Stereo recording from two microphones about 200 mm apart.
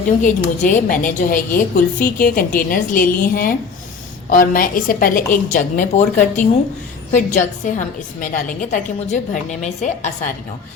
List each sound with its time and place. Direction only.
0.2 s a woman's voice: 40° left (ahead or behind)